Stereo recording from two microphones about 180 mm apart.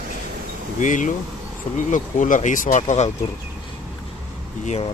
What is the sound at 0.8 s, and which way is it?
Speech, 45° left (ahead or behind).